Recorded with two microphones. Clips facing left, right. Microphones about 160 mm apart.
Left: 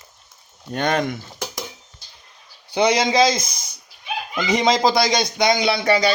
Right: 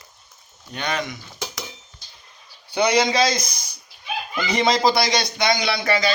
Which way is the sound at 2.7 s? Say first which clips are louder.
Left 2 dB; 25° left (ahead or behind).